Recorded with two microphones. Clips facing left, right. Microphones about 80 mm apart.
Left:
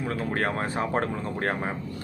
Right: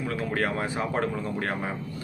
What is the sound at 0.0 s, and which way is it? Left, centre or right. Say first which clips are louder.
Speech: even; left.